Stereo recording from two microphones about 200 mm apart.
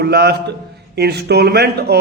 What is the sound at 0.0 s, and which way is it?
A man's voice, 55° right (ahead or behind).